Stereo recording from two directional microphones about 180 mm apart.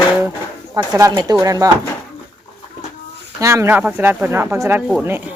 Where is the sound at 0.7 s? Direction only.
15° right (ahead or behind).